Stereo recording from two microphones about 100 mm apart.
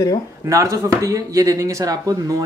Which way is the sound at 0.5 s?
35° right (ahead or behind).